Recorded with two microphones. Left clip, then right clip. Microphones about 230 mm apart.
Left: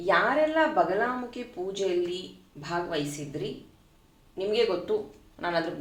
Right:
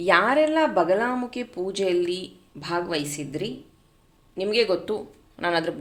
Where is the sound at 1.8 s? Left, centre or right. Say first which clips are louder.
Right 5 dB; right.